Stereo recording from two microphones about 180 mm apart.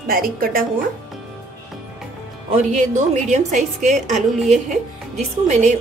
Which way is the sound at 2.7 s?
40° right (ahead or behind).